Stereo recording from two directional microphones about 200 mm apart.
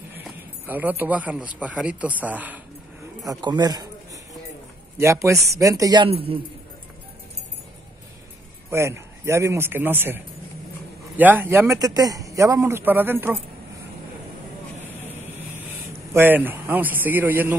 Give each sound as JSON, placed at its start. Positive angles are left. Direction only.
{"t": 0.1, "sound": "a sound", "side_deg": -10}
{"t": 1.6, "sound": "a man's voice", "side_deg": -5}
{"t": 3.3, "sound": "a man's voice", "side_deg": -20}
{"t": 6.0, "sound": "a man's voice", "side_deg": -30}
{"t": 8.6, "sound": "a man's voice", "side_deg": -15}
{"t": 16.1, "sound": "a man's voice", "side_deg": -10}